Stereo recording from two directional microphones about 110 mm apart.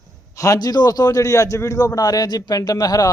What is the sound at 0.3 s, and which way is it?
A man's voice, 30° left (ahead or behind).